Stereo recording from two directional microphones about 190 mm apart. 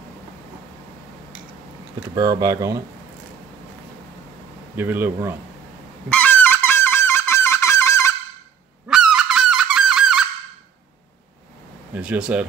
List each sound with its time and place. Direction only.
2.1 s speech: 20° right (ahead or behind)
4.7 s speech: 10° right (ahead or behind)
6.0 s goose: 10° left (ahead or behind)
8.8 s goose: 5° right (ahead or behind)
11.9 s speech: 5° right (ahead or behind)